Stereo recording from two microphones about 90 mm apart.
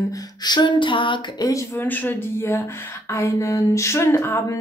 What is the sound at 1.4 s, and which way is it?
Speech, 35° left (ahead or behind).